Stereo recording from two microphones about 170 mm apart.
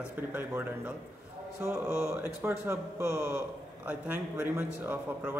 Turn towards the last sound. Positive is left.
turn(degrees=-10)  # may be behind; listen again after turning